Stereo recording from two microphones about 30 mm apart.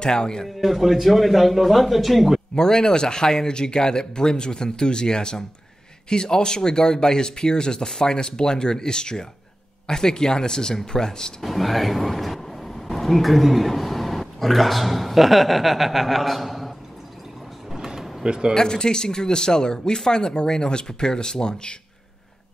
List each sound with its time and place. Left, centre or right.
0.0 s speech: left
0.6 s a man's voice: centre
2.5 s speech: left
11.4 s speech: centre
17.7 s vehicle: centre
18.2 s speech: right
18.5 s speech: left